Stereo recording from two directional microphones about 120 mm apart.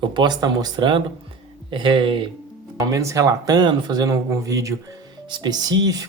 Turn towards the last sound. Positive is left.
turn(degrees=-35)  # may be behind; listen again after turning